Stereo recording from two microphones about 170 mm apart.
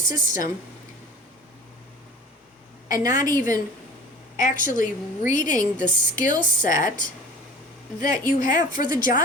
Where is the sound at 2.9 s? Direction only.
50° left (ahead or behind).